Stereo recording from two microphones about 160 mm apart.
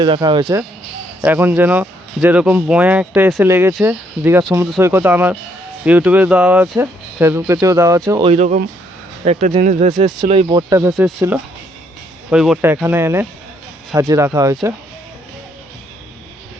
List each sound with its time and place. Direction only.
0.0 s speech: 30° right (ahead or behind)
1.2 s speech: 10° right (ahead or behind)
8.2 s speech: 40° right (ahead or behind)
10.5 s speech: 25° right (ahead or behind)
12.3 s speech: 5° right (ahead or behind)
12.6 s speech: 15° right (ahead or behind)